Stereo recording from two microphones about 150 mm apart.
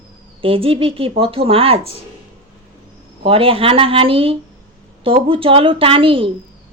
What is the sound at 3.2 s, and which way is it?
Speech, 40° right (ahead or behind).